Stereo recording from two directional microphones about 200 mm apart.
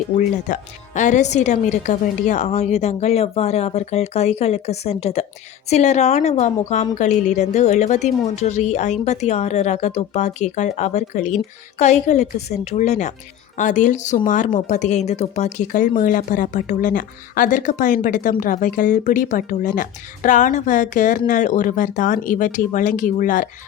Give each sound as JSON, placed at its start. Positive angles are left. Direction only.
{"t": 0.2, "sound": "speech", "side_deg": 40}